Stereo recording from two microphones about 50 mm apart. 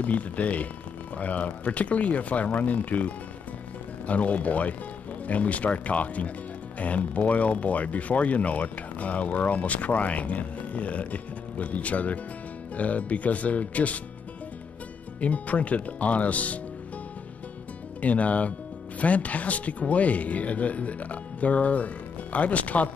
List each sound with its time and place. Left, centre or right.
0.0 s speech: left
4.1 s speech: left
15.1 s speech: left
18.0 s speech: left